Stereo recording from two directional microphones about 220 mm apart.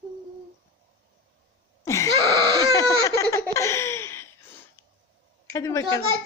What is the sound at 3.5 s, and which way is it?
Laughter, 15° left (ahead or behind).